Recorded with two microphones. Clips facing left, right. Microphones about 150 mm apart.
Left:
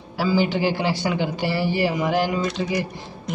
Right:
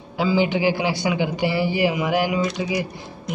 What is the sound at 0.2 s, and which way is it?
A man's voice, 20° right (ahead or behind).